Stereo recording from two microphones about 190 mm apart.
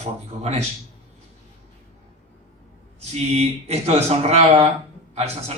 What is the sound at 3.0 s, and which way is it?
A man's voice, 35° right (ahead or behind).